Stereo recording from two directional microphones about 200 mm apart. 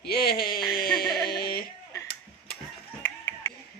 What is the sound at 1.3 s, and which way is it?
Music, 50° left (ahead or behind).